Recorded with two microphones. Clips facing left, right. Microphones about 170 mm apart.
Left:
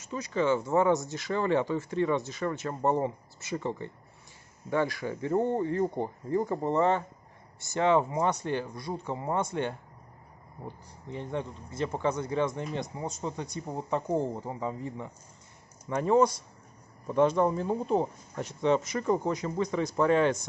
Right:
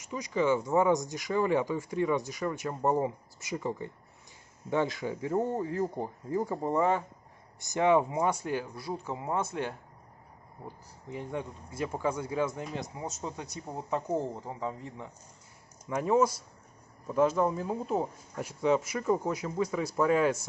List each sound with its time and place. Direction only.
0.0 s speech: 15° right (ahead or behind)
5.1 s speech: 5° right (ahead or behind)
11.1 s speech: 5° right (ahead or behind)